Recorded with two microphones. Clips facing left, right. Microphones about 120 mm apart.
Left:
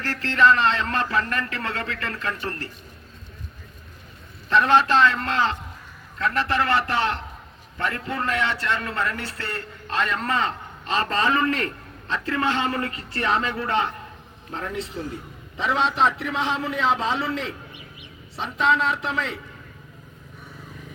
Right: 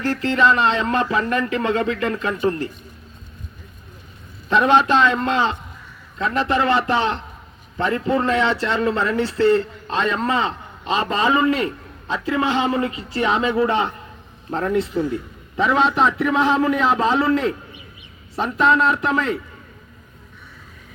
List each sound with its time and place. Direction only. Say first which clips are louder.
0.0 s a man's voice: right 2 dB; 15° right (ahead or behind)
4.4 s a man's voice: right 3 dB; 15° right (ahead or behind)
14.5 s a man's voice: right 10 dB; 50° right (ahead or behind)
15.1 s a man's voice: right 9 dB; 60° right (ahead or behind)